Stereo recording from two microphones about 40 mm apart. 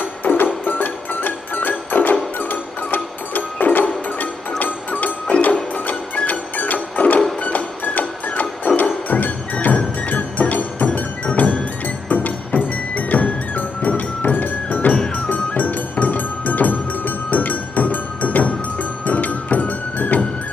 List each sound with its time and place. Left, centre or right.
0.0 s music: left